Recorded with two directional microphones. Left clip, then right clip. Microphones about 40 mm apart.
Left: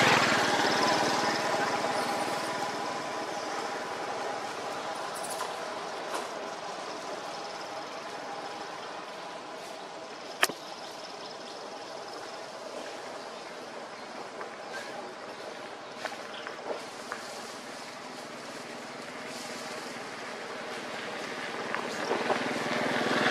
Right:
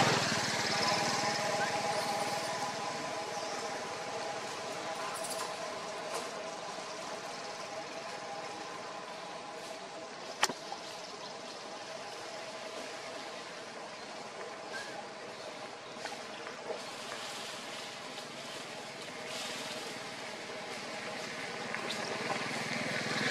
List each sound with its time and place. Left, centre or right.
0.0 s vehicle: left; by 4.9 s centre
21.4 s vehicle: centre